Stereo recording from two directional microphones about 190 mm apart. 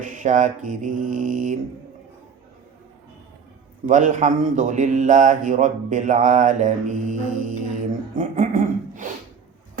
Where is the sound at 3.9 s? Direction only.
40° right (ahead or behind).